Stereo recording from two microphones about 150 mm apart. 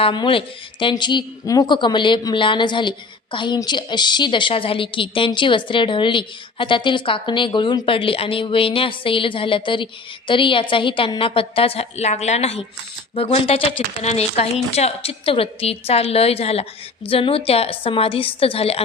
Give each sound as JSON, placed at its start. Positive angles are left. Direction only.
{"t": 0.0, "sound": "a woman's voice", "side_deg": 35}